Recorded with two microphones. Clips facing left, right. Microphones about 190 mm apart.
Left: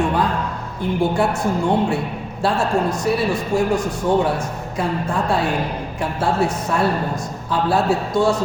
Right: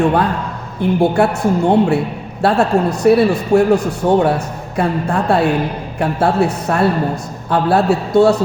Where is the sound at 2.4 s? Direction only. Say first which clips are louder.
Right 5 dB; 65° right (ahead or behind).